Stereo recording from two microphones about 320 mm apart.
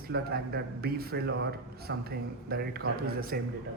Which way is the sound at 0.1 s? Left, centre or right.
Right.